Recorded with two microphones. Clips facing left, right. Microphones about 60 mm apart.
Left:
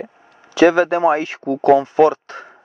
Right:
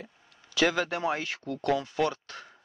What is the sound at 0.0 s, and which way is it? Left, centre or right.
Speech, left.